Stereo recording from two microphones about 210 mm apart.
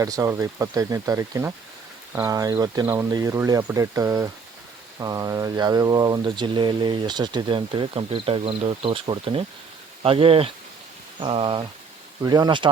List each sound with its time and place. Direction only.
0.0 s speech: 15° right (ahead or behind)